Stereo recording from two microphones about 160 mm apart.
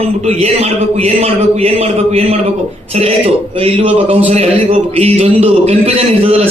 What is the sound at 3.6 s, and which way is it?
A man's voice, 35° right (ahead or behind).